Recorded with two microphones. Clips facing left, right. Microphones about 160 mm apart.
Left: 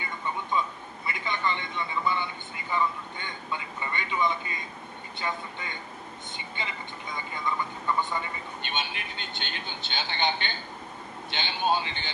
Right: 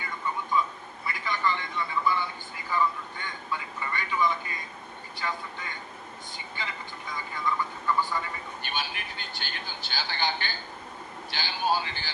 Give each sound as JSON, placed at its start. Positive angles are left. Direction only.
{"t": 0.6, "sound": "a sound", "side_deg": 20}
{"t": 1.0, "sound": "vehicle", "side_deg": 25}
{"t": 5.2, "sound": "a man's voice", "side_deg": 20}